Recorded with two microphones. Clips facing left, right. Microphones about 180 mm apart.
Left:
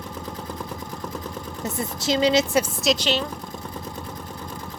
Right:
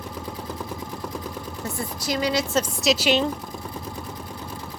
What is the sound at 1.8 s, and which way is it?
Speech, 25° left (ahead or behind).